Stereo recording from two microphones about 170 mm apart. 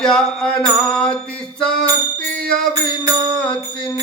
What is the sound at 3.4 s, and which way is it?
Speech, 5° left (ahead or behind).